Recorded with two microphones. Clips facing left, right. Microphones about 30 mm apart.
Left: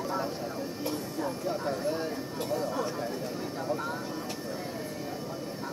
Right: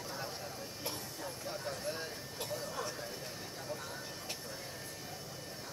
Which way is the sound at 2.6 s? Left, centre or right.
Left.